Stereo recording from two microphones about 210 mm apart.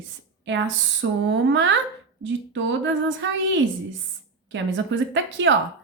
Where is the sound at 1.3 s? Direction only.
60° right (ahead or behind).